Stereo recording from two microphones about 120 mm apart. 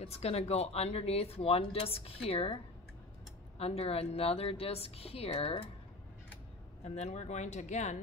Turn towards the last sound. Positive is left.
turn(degrees=80)